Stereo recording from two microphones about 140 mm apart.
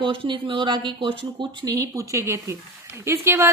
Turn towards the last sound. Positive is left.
turn(degrees=-20)  # may be behind; listen again after turning